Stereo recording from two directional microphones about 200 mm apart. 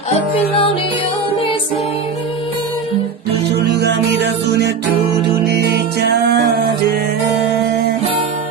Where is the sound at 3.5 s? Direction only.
55° right (ahead or behind).